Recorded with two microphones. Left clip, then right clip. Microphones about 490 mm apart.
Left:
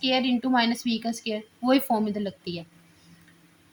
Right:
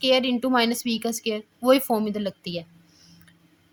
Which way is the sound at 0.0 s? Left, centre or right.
Right.